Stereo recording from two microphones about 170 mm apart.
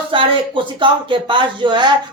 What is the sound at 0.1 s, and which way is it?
A man's voice, 30° right (ahead or behind).